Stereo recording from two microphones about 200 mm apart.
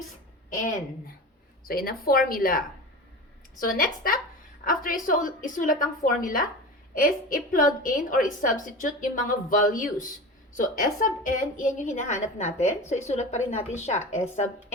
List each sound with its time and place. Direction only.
0.5 s a woman's voice: 40° left (ahead or behind)